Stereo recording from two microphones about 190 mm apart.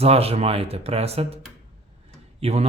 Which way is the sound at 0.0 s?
30° right (ahead or behind).